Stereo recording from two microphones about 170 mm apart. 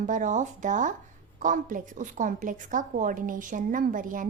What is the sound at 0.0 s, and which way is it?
A woman's voice, 50° right (ahead or behind).